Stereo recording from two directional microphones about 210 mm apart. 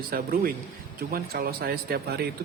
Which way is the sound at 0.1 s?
45° right (ahead or behind).